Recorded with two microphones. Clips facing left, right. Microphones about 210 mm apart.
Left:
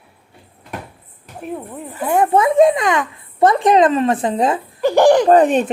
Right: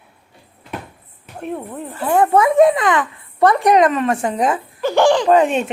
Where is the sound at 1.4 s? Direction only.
Centre (ahead or behind).